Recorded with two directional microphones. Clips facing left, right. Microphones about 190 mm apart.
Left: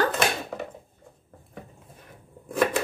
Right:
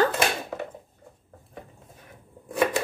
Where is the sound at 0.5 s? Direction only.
Centre (ahead or behind).